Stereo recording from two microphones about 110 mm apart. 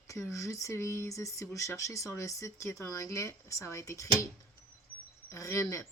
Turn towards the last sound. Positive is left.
turn(degrees=30)  # may be behind; listen again after turning